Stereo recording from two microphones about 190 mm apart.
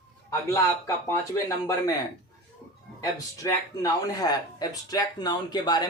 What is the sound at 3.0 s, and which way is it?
Speech, 15° left (ahead or behind).